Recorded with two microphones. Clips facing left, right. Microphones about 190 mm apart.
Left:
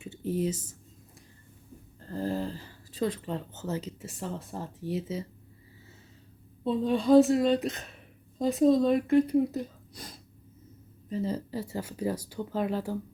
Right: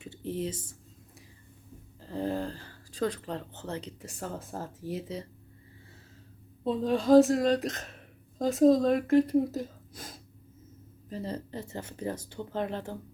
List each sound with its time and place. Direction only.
0.3 s speech: 30° right (ahead or behind)
2.0 s a sound: centre (ahead or behind)
3.2 s speech: 5° left (ahead or behind)
6.7 s speech: centre (ahead or behind)
9.6 s a sound: centre (ahead or behind)
11.1 s speech: 5° left (ahead or behind)